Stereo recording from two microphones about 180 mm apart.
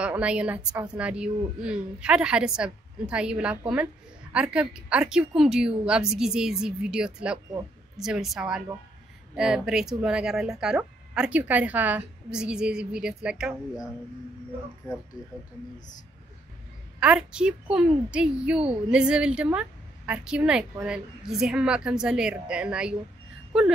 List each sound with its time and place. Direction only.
0.0 s a woman's voice: 5° right (ahead or behind)
17.0 s a woman's voice: 5° right (ahead or behind)